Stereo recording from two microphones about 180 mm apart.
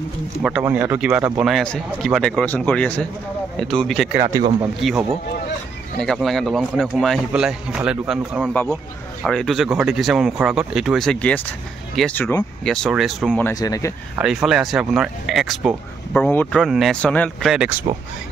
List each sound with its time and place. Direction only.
0.4 s speech: 5° right (ahead or behind)
13.5 s speech: 20° left (ahead or behind)
14.1 s speech: 5° right (ahead or behind)